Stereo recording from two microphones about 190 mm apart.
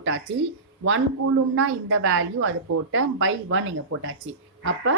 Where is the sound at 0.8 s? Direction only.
90° right.